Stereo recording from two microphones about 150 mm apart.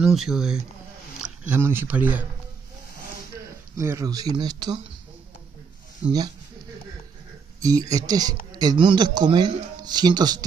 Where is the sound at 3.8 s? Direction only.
20° right (ahead or behind).